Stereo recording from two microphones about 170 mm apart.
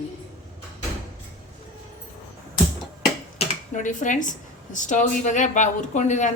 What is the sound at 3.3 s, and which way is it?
Speech, 50° left (ahead or behind).